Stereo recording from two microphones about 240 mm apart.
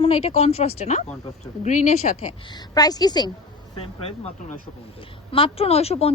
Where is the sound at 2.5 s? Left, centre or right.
Centre.